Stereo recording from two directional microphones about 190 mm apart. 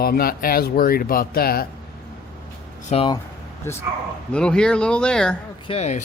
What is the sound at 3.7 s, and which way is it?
Speech, 15° left (ahead or behind).